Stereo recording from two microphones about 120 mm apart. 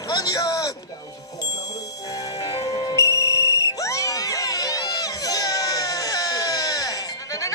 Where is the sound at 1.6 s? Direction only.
30° left (ahead or behind).